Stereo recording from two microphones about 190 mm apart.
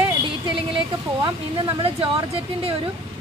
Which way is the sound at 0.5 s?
25° right (ahead or behind).